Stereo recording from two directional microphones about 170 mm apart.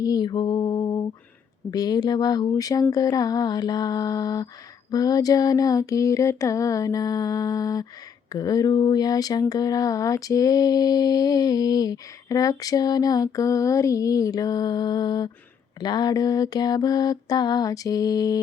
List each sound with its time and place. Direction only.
0.0 s lullaby: 25° left (ahead or behind)
1.7 s speech: 20° left (ahead or behind)